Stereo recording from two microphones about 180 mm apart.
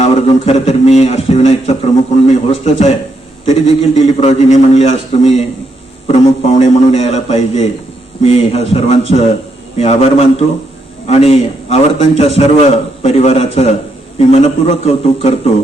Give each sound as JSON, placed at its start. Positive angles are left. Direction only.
{"t": 0.0, "sound": "a man's voice", "side_deg": 35}